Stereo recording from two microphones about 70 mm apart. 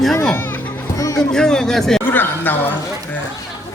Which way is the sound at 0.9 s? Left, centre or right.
Left.